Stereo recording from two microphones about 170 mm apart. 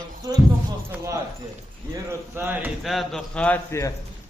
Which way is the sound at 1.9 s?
15° right (ahead or behind).